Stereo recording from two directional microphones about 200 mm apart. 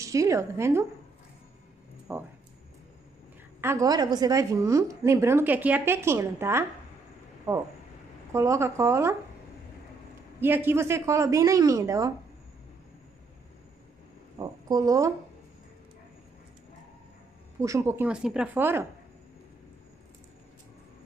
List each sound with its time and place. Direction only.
0.0 s a woman's voice: 15° right (ahead or behind)
2.1 s a woman's voice: 10° right (ahead or behind)
3.6 s a woman's voice: 15° right (ahead or behind)
8.3 s a woman's voice: 15° right (ahead or behind)
10.4 s a woman's voice: 10° right (ahead or behind)
14.4 s a woman's voice: 20° right (ahead or behind)
17.6 s a woman's voice: 15° right (ahead or behind)